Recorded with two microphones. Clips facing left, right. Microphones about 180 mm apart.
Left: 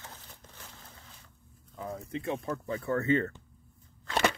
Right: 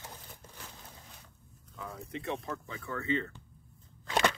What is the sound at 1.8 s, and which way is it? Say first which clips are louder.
Speech: left 4 dB; 30° left (ahead or behind).